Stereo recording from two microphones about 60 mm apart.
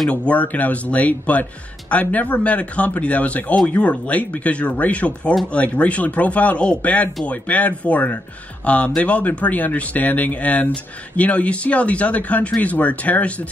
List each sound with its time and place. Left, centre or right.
0.1 s speech: left